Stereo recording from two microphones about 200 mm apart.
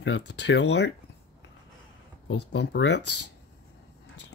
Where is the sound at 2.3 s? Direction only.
60° left (ahead or behind).